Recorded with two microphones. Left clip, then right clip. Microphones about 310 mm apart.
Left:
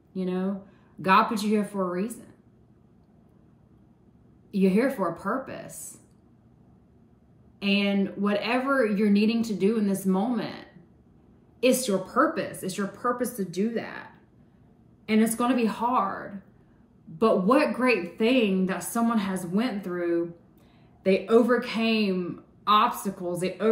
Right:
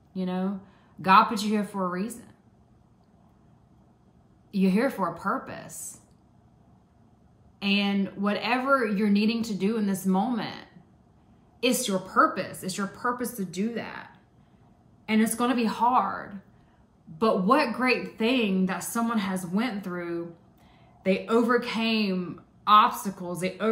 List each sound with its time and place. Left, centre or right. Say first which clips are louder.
0.1 s a woman's voice: left 2 dB; centre
4.5 s a woman's voice: left 2 dB; centre
7.5 s a woman's voice: left 1 dB; centre
11.6 s a woman's voice: left 3 dB; centre
15.0 s a woman's voice: left 1 dB; centre
17.2 s a woman's voice: left 1 dB; centre